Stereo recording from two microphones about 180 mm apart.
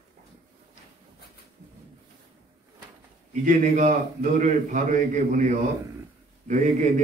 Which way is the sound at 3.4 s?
45° right (ahead or behind).